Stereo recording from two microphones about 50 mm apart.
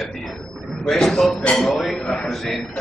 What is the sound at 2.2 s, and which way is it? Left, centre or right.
Speech, centre.